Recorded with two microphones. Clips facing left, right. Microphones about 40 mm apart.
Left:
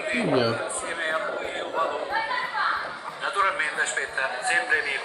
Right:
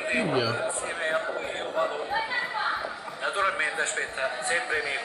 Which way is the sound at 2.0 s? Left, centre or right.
Left.